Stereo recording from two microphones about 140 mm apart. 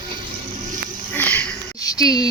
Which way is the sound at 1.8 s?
25° left (ahead or behind).